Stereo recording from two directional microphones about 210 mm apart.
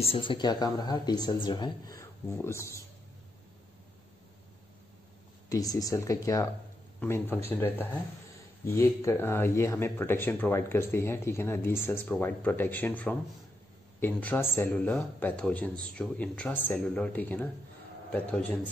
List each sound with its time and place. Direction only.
0.0 s speech: 25° left (ahead or behind)
5.5 s speech: 15° left (ahead or behind)